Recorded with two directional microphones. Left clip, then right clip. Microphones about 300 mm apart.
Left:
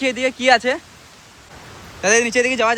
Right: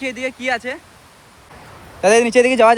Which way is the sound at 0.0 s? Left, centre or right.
Centre.